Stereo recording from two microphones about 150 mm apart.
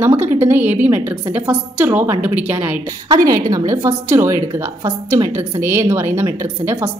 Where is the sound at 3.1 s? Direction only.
25° right (ahead or behind).